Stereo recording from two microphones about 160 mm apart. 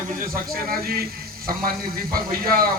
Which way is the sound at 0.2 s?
65° right (ahead or behind).